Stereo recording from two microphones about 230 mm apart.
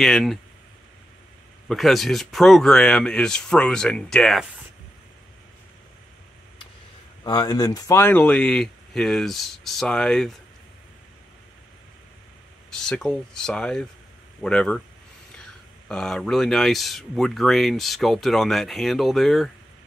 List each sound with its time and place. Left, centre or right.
0.0 s speech: centre
1.7 s speech: centre
7.2 s speech: centre
12.7 s speech: centre
15.9 s speech: centre